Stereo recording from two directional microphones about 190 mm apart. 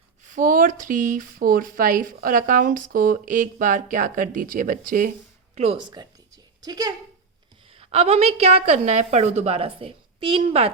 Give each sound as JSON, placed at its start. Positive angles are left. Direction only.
{"t": 0.3, "sound": "speech", "side_deg": -45}
{"t": 5.5, "sound": "a sound", "side_deg": -30}
{"t": 7.7, "sound": "a woman's voice", "side_deg": -30}